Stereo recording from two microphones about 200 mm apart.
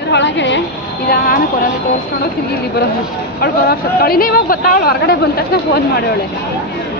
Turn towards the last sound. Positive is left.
turn(degrees=50)  # may be behind; listen again after turning